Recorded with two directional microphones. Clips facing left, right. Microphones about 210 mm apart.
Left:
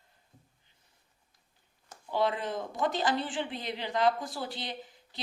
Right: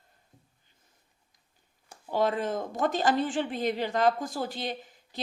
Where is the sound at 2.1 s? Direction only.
45° right (ahead or behind).